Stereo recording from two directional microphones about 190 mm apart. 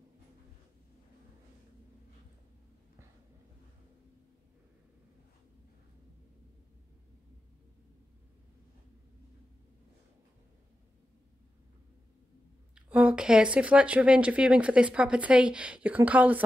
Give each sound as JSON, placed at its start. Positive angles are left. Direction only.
{"t": 12.7, "sound": "speech", "side_deg": -5}